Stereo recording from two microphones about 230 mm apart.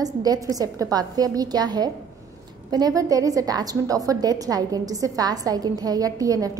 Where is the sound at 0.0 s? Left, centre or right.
Centre.